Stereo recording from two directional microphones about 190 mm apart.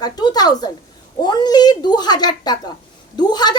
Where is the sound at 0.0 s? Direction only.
20° left (ahead or behind).